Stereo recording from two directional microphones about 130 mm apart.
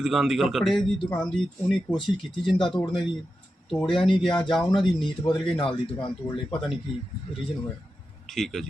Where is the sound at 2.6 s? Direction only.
40° left (ahead or behind).